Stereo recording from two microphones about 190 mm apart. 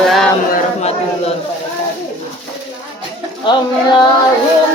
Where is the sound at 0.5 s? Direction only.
35° left (ahead or behind).